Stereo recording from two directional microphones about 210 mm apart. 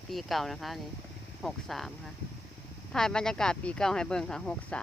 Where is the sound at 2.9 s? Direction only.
5° left (ahead or behind).